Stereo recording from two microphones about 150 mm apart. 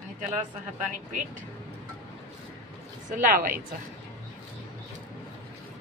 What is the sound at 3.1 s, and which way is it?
Speech, 70° right (ahead or behind).